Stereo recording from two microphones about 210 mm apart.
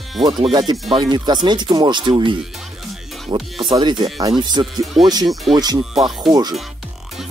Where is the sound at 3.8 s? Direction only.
20° right (ahead or behind).